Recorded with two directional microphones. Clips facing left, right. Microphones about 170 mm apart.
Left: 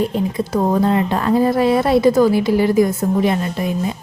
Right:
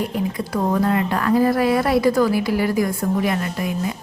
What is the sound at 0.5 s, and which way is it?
A woman's voice, 25° left (ahead or behind).